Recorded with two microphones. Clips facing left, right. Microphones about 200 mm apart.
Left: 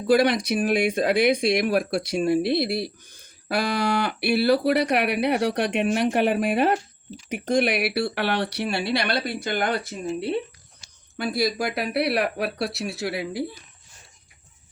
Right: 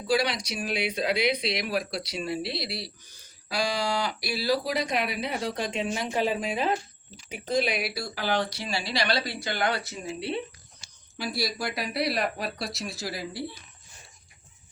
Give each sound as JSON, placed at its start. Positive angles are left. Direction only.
{"t": 0.1, "sound": "speech", "side_deg": 55}